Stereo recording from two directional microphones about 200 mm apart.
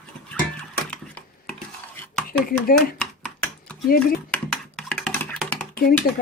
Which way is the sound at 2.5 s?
45° left (ahead or behind).